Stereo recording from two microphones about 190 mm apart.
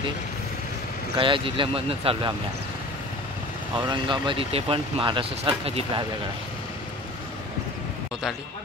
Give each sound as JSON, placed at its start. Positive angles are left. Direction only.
{"t": 1.1, "sound": "speech", "side_deg": -25}
{"t": 3.7, "sound": "speech", "side_deg": -25}